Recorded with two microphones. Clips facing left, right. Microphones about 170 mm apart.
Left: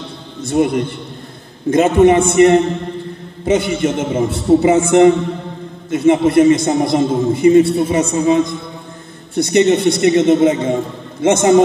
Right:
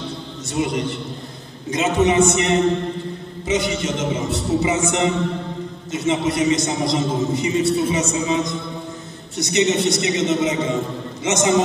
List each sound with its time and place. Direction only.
0.5 s a man's voice: 55° left (ahead or behind)